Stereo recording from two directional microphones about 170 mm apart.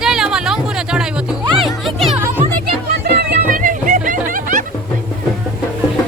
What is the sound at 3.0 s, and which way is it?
Music, 55° right (ahead or behind).